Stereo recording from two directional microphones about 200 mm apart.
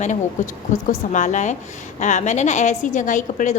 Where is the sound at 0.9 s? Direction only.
40° left (ahead or behind).